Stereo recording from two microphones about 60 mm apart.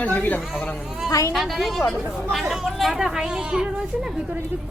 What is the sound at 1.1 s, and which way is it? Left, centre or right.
Speech, left.